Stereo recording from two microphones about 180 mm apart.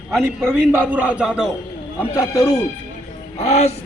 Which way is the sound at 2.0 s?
15° left (ahead or behind).